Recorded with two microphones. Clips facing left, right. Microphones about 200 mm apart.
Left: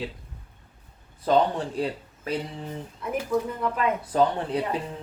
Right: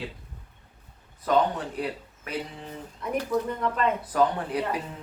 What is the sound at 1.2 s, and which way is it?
Speech, 30° left (ahead or behind).